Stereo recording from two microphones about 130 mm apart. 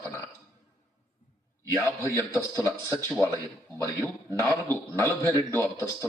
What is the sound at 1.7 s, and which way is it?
A man's voice, 20° left (ahead or behind).